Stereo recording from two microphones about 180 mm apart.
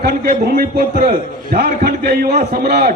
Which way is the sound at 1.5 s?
55° right (ahead or behind).